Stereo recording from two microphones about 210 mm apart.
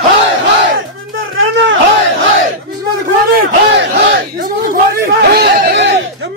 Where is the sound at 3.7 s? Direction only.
55° right (ahead or behind).